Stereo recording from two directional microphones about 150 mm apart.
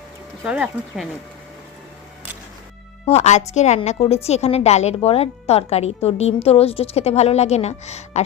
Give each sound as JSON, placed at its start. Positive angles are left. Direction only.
{"t": 0.4, "sound": "speech", "side_deg": -5}
{"t": 3.1, "sound": "speech", "side_deg": 50}